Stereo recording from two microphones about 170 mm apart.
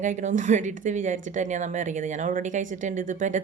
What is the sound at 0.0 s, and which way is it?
A woman's voice, 45° right (ahead or behind).